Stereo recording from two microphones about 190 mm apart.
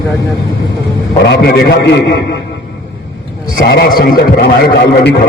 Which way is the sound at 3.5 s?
50° left (ahead or behind).